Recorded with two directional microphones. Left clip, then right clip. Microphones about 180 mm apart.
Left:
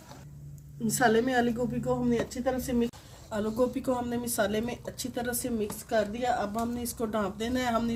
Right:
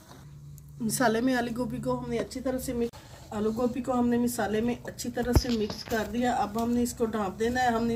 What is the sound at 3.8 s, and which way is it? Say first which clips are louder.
Speech: right 3 dB; 55° left (ahead or behind).